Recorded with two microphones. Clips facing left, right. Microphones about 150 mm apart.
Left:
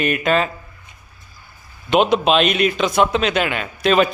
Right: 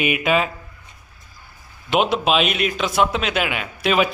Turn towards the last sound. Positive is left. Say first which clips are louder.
# left 3 dB
turn(degrees=-5)  # may be behind; listen again after turning